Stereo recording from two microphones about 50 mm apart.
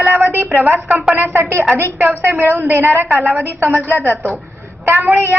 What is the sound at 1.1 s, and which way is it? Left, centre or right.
A woman's voice, right.